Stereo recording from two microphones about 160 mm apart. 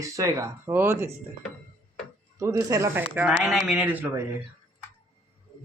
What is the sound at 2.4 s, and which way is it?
Speech, 20° right (ahead or behind).